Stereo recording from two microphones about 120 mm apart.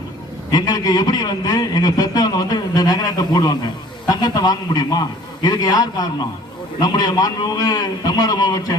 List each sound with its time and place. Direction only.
0.5 s a man's voice: 35° left (ahead or behind)